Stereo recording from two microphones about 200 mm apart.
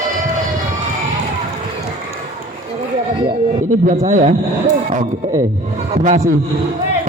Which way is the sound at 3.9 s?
40° right (ahead or behind).